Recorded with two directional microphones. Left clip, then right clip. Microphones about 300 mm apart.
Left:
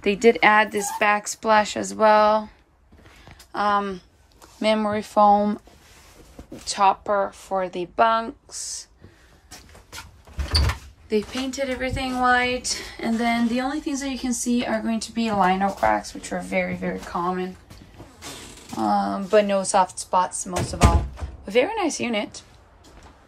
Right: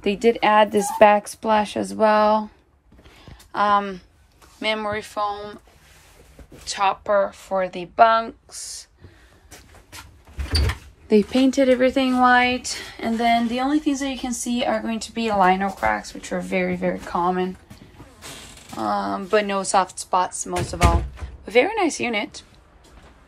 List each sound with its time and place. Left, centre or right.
0.0 s speech: centre
3.5 s a woman's voice: centre; by 5.6 s left
6.6 s a woman's voice: centre
11.1 s speech: centre
18.8 s a woman's voice: centre